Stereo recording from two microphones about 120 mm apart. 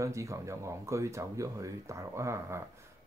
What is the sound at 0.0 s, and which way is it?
Speech, 25° right (ahead or behind).